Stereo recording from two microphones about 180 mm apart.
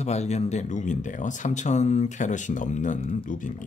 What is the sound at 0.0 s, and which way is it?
Speech, 40° left (ahead or behind).